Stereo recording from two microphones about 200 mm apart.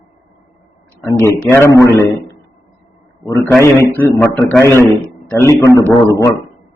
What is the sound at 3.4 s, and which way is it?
A man's voice, 10° left (ahead or behind).